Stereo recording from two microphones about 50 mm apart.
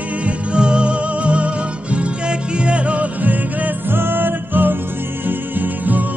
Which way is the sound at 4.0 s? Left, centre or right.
Right.